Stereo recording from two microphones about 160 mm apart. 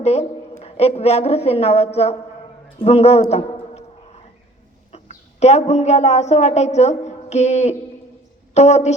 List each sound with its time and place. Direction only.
0.0 s a woman's voice: 45° left (ahead or behind)
2.7 s a sound: 40° left (ahead or behind)
4.9 s a woman's voice: 45° left (ahead or behind)